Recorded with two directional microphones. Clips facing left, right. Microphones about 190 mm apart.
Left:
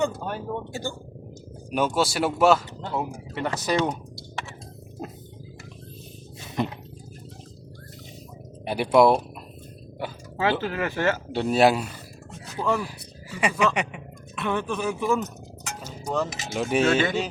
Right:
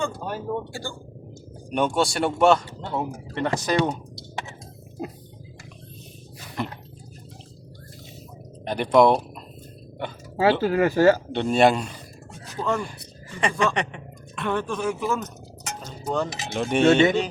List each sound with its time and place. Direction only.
0.2 s speech: centre (ahead or behind)
0.7 s speech: 20° left (ahead or behind)
1.7 s speech: 5° left (ahead or behind)
3.8 s typing: 20° right (ahead or behind)
6.6 s speech: 20° left (ahead or behind)
8.6 s speech: 10° left (ahead or behind)
10.3 s speech: 35° right (ahead or behind)
11.3 s speech: 5° left (ahead or behind)
16.8 s speech: 25° right (ahead or behind)